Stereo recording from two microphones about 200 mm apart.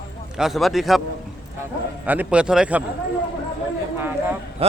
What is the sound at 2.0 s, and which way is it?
Speech, 5° right (ahead or behind).